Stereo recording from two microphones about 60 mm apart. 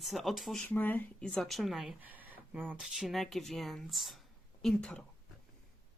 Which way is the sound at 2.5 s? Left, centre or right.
Right.